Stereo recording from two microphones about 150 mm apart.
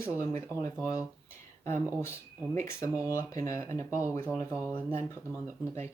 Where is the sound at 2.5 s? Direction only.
20° left (ahead or behind).